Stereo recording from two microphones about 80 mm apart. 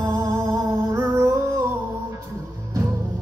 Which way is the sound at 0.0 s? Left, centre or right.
Right.